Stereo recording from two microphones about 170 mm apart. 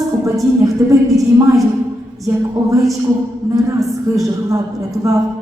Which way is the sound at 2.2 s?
20° right (ahead or behind).